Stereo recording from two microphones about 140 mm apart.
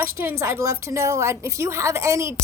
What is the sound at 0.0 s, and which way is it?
A woman's voice, 20° right (ahead or behind).